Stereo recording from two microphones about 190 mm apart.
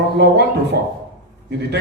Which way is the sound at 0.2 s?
60° right (ahead or behind).